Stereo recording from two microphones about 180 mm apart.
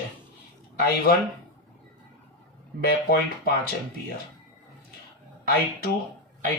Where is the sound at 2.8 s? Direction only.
55° left (ahead or behind).